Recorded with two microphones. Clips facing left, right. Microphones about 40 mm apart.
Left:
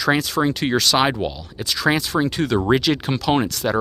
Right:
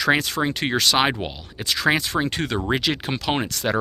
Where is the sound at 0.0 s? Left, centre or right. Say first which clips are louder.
Left 2 dB; right.